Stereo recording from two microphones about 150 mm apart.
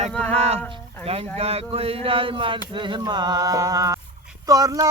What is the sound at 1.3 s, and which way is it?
Speech, 40° right (ahead or behind).